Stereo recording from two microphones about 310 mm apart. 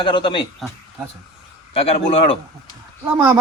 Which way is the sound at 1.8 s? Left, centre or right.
Centre.